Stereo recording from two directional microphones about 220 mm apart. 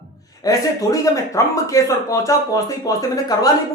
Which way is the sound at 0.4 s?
15° left (ahead or behind).